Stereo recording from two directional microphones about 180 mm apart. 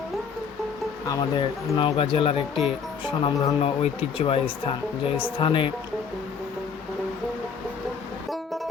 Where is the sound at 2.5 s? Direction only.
5° right (ahead or behind).